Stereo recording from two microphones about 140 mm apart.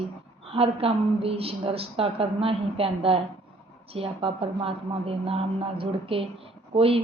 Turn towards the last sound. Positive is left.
turn(degrees=-40)  # may be behind; listen again after turning